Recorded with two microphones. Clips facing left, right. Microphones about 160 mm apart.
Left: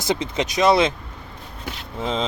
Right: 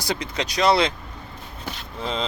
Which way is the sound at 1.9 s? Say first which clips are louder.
Left 3 dB; 20° left (ahead or behind).